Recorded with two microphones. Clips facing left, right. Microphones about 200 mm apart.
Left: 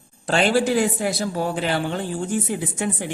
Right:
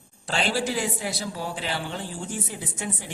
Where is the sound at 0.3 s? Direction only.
55° left (ahead or behind).